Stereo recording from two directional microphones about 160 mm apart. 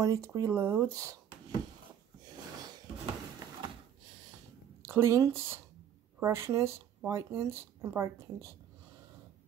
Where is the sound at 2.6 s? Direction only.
25° right (ahead or behind).